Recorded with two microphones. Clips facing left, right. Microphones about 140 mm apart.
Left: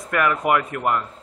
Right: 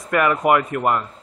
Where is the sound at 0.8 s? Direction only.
20° right (ahead or behind).